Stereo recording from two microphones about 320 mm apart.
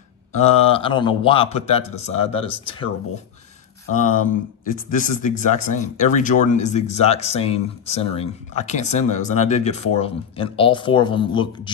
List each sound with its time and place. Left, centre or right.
0.3 s speech: centre
3.9 s speech: left